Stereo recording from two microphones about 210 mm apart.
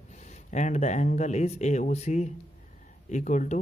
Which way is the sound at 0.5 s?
35° left (ahead or behind).